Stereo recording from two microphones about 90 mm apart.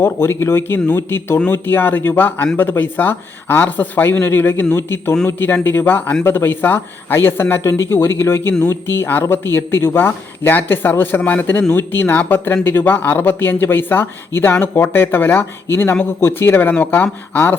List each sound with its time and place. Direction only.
0.0 s speech: 25° left (ahead or behind)